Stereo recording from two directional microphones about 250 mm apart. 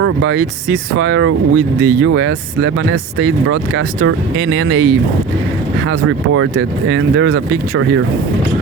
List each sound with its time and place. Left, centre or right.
0.0 s speech: right
5.9 s speech: right